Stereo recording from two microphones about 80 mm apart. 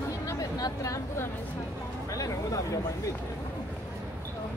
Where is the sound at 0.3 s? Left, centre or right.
Left.